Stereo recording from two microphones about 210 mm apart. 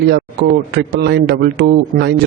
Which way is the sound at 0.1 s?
50° right (ahead or behind).